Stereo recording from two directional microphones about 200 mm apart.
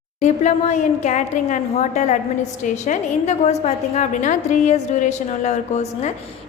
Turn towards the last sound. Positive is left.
turn(degrees=35)  # may be behind; listen again after turning